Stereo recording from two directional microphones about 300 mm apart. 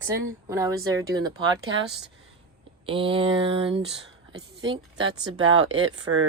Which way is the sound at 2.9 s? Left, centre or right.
Centre.